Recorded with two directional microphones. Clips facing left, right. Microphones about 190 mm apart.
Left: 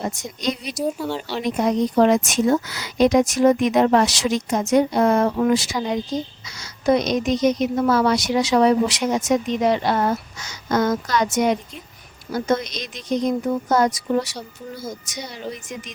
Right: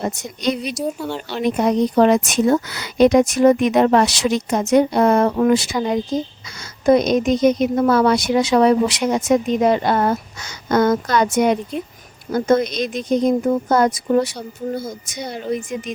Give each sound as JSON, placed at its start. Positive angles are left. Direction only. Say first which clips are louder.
{"t": 0.1, "sound": "speech", "louder": "right 4 dB", "side_deg": -65}
{"t": 0.9, "sound": "speech", "louder": "left 3 dB", "side_deg": 5}
{"t": 1.4, "sound": "speech", "louder": "right 4 dB", "side_deg": -60}